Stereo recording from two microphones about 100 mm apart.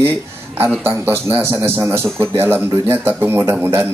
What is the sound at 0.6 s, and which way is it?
A man's voice, 20° right (ahead or behind).